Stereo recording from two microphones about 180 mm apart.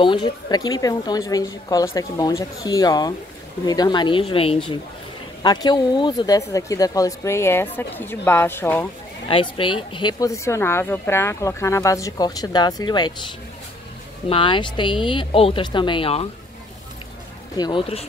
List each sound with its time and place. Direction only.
0.0 s speech: 25° left (ahead or behind)
9.3 s speech: 30° left (ahead or behind)
14.3 s speech: 30° left (ahead or behind)
17.6 s speech: 25° left (ahead or behind)